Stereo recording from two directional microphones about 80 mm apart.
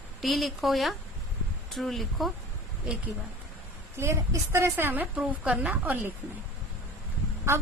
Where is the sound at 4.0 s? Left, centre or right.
Right.